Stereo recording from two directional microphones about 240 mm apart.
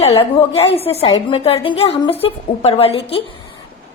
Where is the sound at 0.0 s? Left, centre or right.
Left.